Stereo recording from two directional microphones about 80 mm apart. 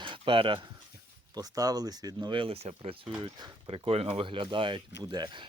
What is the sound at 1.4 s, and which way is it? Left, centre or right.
Speech, right.